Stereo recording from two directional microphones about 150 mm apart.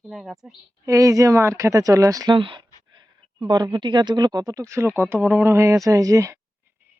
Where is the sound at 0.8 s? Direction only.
20° right (ahead or behind).